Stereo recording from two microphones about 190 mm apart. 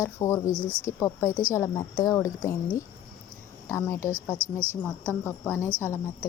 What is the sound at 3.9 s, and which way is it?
Speech, 15° left (ahead or behind).